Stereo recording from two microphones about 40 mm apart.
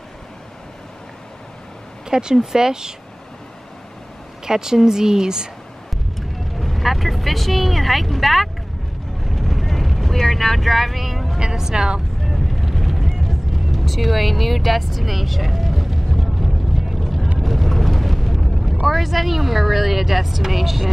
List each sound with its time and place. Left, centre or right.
2.0 s speech: centre
4.5 s speech: centre
6.1 s speech: centre
9.2 s vehicle: centre
11.3 s speech: centre
12.3 s vehicle: centre
17.4 s eruption: centre
18.9 s speech: centre